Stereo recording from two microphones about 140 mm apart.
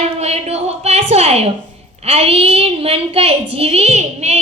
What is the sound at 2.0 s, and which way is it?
A woman's voice, 45° right (ahead or behind).